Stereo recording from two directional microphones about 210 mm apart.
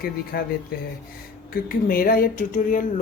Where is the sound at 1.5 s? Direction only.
45° left (ahead or behind).